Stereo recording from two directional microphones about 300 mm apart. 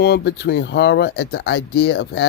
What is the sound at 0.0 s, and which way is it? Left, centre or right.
Speech, left.